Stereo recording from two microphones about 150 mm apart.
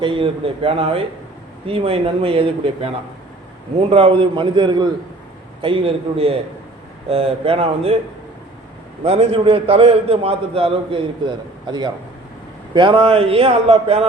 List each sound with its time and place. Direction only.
0.0 s a man's voice: 35° right (ahead or behind)
9.0 s a man's voice: 45° right (ahead or behind)